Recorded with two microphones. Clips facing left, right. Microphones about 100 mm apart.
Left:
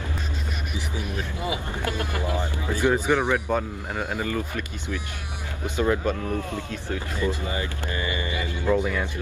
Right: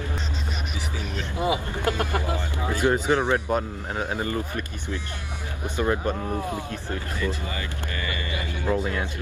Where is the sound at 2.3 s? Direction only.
20° left (ahead or behind).